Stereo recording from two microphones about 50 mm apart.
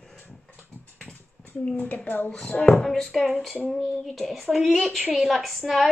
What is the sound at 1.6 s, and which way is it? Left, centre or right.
Speech, left.